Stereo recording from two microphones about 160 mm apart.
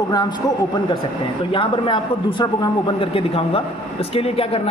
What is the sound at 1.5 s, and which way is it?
A woman's voice, 35° left (ahead or behind).